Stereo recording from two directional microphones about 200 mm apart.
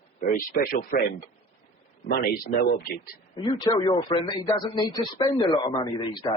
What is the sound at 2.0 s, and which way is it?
A man's voice, 50° left (ahead or behind).